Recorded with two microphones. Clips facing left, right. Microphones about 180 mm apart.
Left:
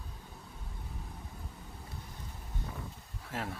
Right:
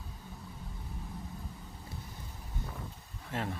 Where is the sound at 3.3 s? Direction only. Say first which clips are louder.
Right 2 dB; 5° left (ahead or behind).